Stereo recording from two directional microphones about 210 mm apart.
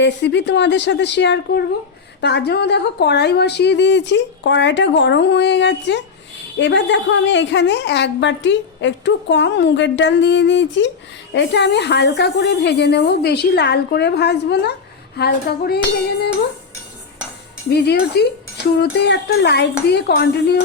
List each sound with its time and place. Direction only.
0.0 s a woman's voice: 55° left (ahead or behind)
18.2 s a woman's voice: 50° left (ahead or behind)